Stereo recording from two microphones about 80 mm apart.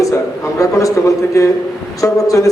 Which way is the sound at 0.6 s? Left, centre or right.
Left.